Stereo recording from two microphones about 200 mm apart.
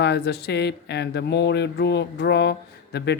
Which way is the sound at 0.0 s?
55° left (ahead or behind).